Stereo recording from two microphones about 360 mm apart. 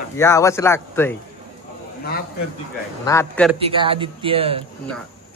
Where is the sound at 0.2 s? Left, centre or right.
Centre.